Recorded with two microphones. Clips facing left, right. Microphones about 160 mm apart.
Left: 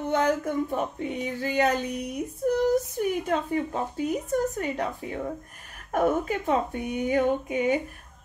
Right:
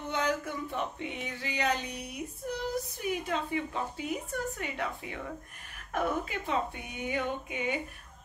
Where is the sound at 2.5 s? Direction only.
50° left (ahead or behind).